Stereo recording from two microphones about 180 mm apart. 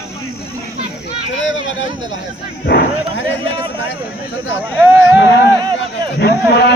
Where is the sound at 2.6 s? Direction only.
60° left (ahead or behind).